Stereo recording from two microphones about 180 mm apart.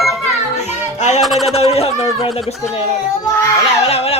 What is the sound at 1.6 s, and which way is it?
Speech, 35° left (ahead or behind).